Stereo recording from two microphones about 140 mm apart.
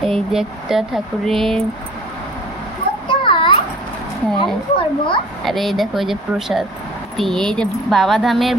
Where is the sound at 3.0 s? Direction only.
40° left (ahead or behind).